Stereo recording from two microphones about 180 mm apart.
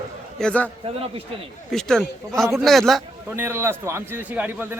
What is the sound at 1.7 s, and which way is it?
A man's voice, 5° left (ahead or behind).